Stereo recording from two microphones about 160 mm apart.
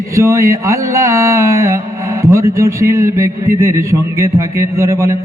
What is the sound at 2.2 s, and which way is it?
A man's voice, 15° right (ahead or behind).